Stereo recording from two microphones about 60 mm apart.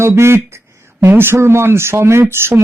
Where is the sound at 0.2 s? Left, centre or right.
Right.